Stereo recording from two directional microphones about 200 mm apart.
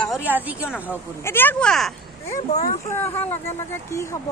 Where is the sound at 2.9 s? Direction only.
10° left (ahead or behind).